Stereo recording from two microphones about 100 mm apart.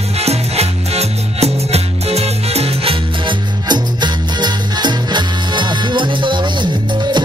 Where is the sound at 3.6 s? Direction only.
45° right (ahead or behind).